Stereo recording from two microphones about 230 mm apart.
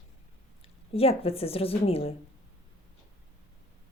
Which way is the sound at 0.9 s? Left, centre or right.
Left.